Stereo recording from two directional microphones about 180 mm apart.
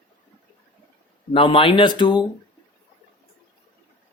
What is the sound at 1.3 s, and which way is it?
Speech, 30° left (ahead or behind).